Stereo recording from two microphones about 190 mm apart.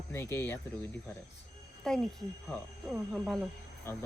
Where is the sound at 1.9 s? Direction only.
Centre (ahead or behind).